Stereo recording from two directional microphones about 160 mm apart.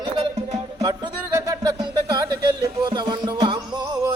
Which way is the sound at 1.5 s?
25° right (ahead or behind).